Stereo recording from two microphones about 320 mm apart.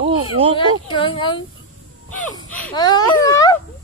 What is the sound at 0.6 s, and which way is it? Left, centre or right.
Speech, centre.